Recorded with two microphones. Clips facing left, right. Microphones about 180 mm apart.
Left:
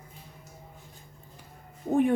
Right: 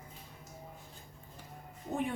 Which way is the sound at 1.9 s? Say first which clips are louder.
Left 11 dB; 50° left (ahead or behind).